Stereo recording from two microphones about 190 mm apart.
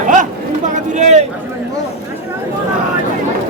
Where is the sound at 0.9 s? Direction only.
35° right (ahead or behind).